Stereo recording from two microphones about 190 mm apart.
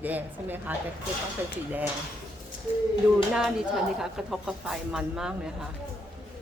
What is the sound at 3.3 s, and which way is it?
Speech, centre (ahead or behind).